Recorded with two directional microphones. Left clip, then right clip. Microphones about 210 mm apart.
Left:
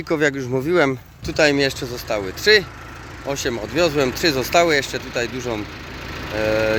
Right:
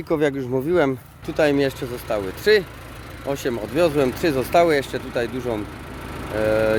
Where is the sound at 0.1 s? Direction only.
Centre (ahead or behind).